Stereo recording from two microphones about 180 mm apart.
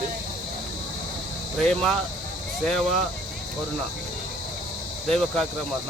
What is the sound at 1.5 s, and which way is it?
Speech, 5° left (ahead or behind).